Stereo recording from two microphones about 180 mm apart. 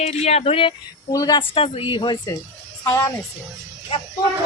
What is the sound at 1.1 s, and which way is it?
Speech, 20° left (ahead or behind).